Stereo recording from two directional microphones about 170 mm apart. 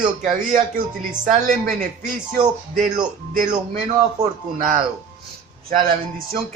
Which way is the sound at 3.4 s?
50° right (ahead or behind).